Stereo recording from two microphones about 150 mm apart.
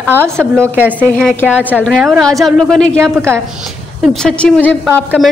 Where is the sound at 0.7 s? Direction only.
10° right (ahead or behind).